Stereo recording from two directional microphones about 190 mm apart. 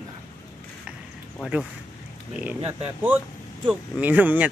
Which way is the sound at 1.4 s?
5° right (ahead or behind).